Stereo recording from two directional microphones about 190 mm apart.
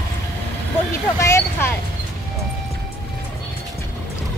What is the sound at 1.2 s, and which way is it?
Speech, 15° left (ahead or behind).